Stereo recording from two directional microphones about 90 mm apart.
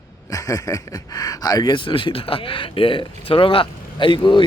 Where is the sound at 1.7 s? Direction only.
70° left (ahead or behind).